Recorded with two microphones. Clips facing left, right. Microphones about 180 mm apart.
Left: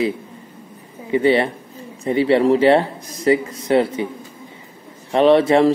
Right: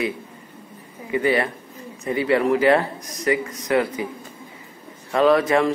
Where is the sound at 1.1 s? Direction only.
25° left (ahead or behind).